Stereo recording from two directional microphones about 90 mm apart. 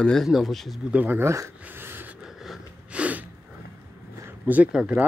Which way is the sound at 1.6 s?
20° right (ahead or behind).